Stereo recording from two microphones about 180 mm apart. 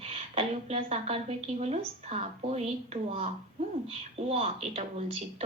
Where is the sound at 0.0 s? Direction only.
30° right (ahead or behind).